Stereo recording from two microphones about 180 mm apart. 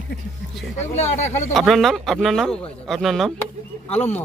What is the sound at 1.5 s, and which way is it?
A man's voice, centre (ahead or behind).